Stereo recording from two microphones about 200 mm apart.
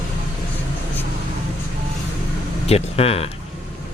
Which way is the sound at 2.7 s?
30° left (ahead or behind).